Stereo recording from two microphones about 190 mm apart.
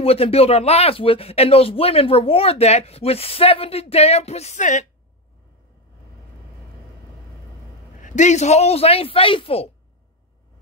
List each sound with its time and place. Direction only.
0.0 s speech: 30° left (ahead or behind)
8.0 s speech: 40° left (ahead or behind)